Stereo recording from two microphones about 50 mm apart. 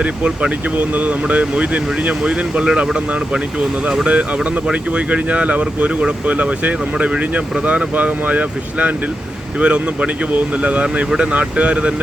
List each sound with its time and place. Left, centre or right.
0.0 s speech: right
4.0 s speech: right